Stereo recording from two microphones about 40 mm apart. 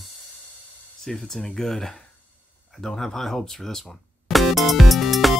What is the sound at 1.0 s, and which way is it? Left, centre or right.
Speech, centre.